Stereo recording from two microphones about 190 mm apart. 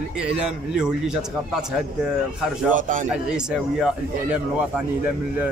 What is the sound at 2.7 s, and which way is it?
Speech, 45° right (ahead or behind).